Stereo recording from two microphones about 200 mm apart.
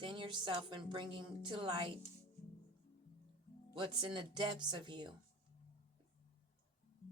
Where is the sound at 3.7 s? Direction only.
25° right (ahead or behind).